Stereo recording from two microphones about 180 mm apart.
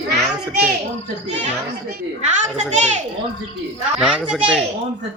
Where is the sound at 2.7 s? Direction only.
40° right (ahead or behind).